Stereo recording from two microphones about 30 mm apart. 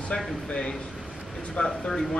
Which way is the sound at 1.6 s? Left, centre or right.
Left.